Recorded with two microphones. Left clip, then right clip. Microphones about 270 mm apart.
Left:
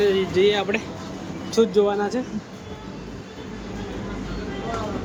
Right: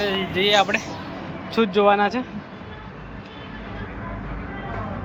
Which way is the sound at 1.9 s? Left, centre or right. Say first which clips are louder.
Right 3 dB; centre.